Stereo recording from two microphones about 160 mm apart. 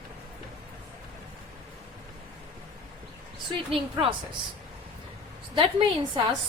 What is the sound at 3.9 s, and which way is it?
Speech, 30° right (ahead or behind).